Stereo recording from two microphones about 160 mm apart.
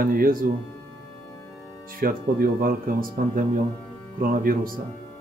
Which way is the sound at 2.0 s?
60° right (ahead or behind).